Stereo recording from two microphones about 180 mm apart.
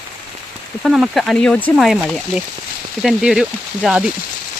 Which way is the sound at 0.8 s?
Centre (ahead or behind).